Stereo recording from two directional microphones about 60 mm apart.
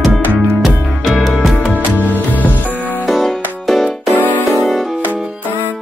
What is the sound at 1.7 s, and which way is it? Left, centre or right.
Music, right.